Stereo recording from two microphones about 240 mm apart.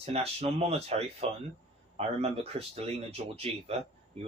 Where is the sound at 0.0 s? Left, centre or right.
Right.